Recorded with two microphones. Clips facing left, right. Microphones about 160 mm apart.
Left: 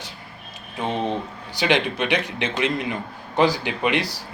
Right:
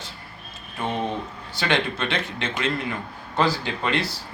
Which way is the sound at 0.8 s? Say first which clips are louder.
Left 2 dB; 20° left (ahead or behind).